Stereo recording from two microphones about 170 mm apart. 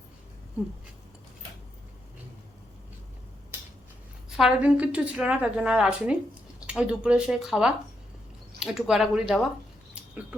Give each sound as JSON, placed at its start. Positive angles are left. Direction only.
{"t": 4.3, "sound": "a woman's voice", "side_deg": -5}